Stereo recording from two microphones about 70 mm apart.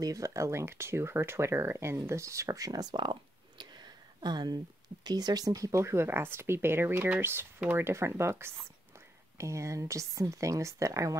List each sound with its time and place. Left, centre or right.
0.0 s speech: right